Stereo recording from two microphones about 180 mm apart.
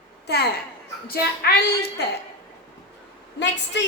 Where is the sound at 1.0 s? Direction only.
60° left (ahead or behind).